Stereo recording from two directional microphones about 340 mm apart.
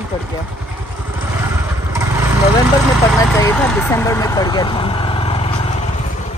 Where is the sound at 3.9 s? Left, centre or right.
Centre.